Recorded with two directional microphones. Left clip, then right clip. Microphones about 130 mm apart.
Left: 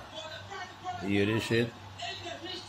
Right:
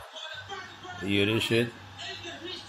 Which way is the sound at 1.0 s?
20° right (ahead or behind).